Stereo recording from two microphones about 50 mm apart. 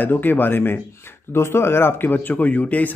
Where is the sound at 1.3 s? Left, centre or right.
Left.